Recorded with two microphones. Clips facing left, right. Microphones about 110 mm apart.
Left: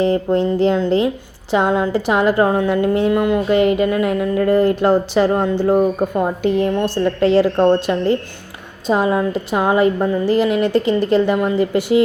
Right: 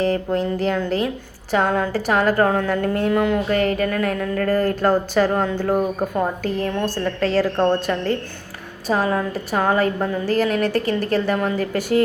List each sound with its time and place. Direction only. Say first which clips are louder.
0.0 s a woman's voice: left 4 dB; 25° left (ahead or behind); by 3.4 s 5° left (ahead or behind)
3.5 s a woman's voice: left 5 dB; 15° left (ahead or behind)